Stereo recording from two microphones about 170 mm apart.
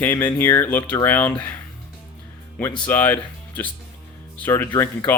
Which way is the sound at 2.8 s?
10° left (ahead or behind).